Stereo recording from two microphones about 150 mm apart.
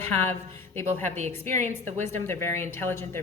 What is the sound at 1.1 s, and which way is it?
Speech, 50° right (ahead or behind).